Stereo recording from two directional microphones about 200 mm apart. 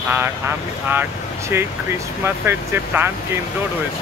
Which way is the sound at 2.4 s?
10° right (ahead or behind).